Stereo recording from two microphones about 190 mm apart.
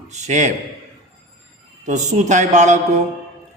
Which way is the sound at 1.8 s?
40° right (ahead or behind).